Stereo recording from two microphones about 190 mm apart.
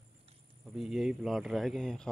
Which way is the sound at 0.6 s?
Centre (ahead or behind).